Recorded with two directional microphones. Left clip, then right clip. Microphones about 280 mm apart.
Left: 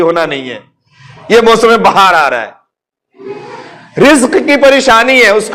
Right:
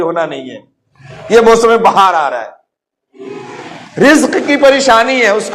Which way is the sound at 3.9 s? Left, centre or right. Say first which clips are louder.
Left 2 dB; left.